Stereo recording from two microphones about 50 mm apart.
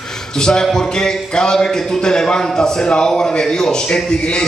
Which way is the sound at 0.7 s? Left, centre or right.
Centre.